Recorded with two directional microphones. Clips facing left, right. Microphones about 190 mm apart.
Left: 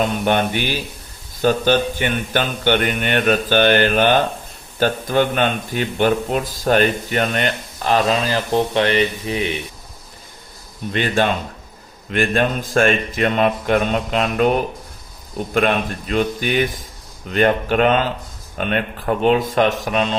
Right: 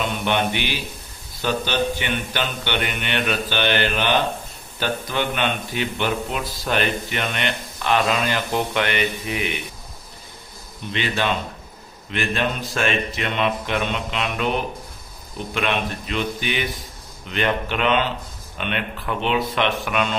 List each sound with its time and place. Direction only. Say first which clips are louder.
0.0 s speech: left 4 dB; 45° left (ahead or behind)
10.9 s speech: left 5 dB; 50° left (ahead or behind)
15.5 s speech: left 6 dB; 45° left (ahead or behind)